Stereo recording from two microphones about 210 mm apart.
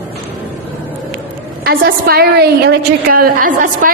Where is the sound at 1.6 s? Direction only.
45° right (ahead or behind).